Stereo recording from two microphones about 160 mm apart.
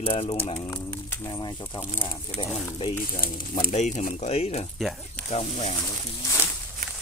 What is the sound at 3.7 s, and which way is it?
Speech, 45° left (ahead or behind).